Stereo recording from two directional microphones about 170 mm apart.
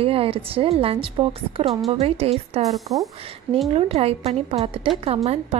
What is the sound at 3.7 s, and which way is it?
A woman's voice, 35° right (ahead or behind).